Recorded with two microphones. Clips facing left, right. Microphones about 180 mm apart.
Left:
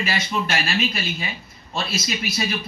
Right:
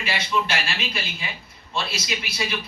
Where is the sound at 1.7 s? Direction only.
45° left (ahead or behind).